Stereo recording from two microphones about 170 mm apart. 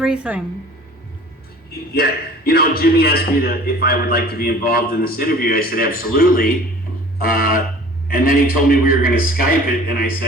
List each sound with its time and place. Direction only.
0.0 s speech: 5° right (ahead or behind)
2.0 s a man's voice: 65° left (ahead or behind)